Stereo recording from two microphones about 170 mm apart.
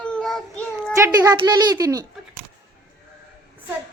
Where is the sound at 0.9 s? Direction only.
20° right (ahead or behind).